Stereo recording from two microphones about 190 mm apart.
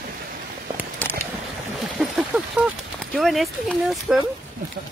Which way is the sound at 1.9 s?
Centre (ahead or behind).